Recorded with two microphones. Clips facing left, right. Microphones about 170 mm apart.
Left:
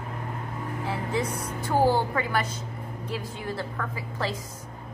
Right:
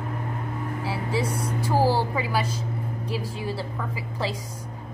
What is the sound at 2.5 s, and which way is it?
Vehicle, 30° right (ahead or behind).